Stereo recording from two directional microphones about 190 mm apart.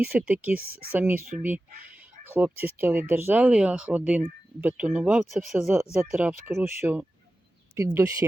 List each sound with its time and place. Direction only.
0.0 s speech: 10° right (ahead or behind)